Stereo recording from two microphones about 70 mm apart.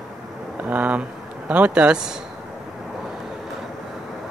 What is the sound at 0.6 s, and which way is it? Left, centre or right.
Speech, right.